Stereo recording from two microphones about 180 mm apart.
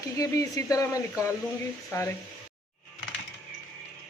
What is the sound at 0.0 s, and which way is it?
Speech, 20° left (ahead or behind).